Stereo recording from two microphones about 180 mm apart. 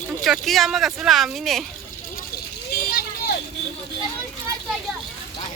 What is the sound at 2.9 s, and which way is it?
Vehicle, 55° left (ahead or behind).